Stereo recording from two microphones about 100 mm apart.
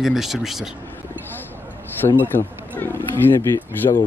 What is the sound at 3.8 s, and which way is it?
Speech, 55° left (ahead or behind).